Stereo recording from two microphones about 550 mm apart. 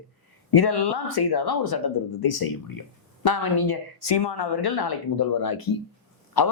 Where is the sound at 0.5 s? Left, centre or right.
Left.